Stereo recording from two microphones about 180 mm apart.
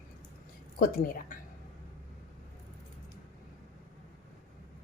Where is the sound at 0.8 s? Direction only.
50° left (ahead or behind).